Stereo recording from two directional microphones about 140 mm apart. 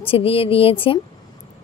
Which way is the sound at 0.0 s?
40° left (ahead or behind).